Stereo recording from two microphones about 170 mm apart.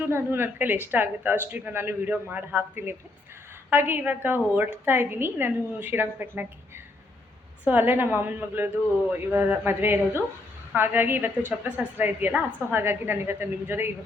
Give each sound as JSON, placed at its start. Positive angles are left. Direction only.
{"t": 0.0, "sound": "a woman's voice", "side_deg": -15}